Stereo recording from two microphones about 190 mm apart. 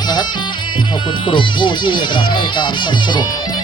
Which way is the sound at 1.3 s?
25° left (ahead or behind).